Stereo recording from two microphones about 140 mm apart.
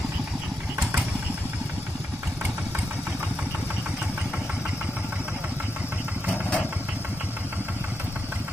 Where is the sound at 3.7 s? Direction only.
10° right (ahead or behind).